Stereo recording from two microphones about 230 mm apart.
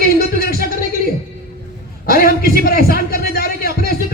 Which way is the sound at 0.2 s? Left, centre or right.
Left.